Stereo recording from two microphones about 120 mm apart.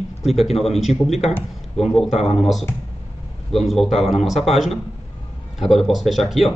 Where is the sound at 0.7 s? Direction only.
Centre (ahead or behind).